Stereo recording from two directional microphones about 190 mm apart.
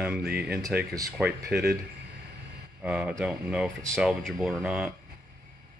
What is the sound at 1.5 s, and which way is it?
Speech, 55° right (ahead or behind).